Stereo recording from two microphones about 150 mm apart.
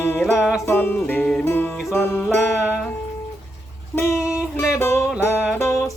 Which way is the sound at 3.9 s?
20° left (ahead or behind).